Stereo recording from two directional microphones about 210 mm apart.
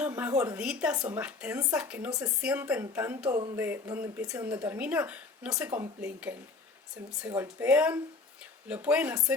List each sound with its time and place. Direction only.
0.0 s speech: 10° right (ahead or behind)